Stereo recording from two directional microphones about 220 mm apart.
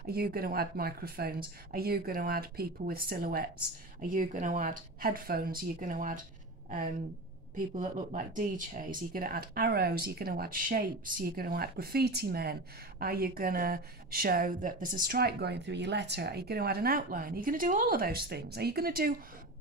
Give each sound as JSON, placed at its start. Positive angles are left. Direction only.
{"t": 0.0, "sound": "a woman's voice", "side_deg": -45}
{"t": 7.5, "sound": "a woman's voice", "side_deg": -35}